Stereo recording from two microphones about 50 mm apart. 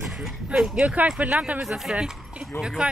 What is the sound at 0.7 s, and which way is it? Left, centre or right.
Speech, right.